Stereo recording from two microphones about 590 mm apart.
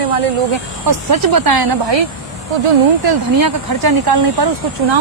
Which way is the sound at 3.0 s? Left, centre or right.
Right.